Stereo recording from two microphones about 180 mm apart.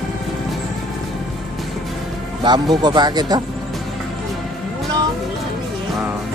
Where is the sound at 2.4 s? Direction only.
25° right (ahead or behind).